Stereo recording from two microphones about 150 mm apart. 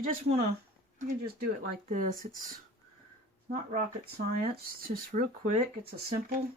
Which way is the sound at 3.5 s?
80° right.